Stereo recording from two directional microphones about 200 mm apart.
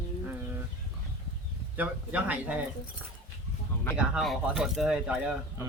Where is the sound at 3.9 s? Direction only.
Centre (ahead or behind).